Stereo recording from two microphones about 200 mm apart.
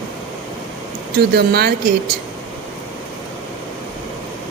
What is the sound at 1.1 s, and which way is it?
Speech, 50° right (ahead or behind).